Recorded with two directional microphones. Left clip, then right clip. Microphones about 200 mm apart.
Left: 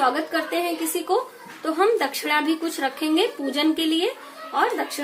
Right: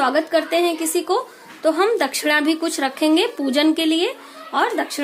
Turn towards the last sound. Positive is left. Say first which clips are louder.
# right 3 dB
turn(degrees=-50)  # may be behind; listen again after turning